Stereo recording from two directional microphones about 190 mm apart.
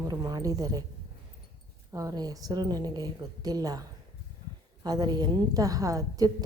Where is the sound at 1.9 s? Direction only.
20° right (ahead or behind).